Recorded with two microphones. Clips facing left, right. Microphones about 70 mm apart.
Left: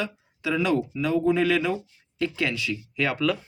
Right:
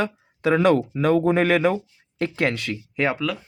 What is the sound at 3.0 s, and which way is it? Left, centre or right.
Speech, right.